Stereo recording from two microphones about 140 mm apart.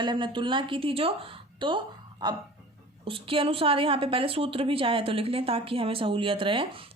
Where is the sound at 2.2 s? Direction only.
30° right (ahead or behind).